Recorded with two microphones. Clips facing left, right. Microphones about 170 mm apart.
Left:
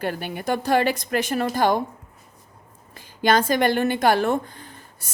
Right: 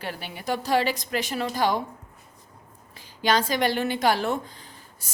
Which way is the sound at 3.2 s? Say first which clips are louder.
Left 4 dB; 50° left (ahead or behind).